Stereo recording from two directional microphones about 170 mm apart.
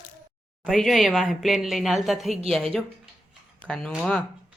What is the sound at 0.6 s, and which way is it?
Speech, centre (ahead or behind).